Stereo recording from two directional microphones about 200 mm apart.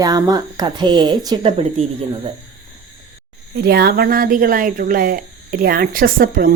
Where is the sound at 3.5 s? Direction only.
50° right (ahead or behind).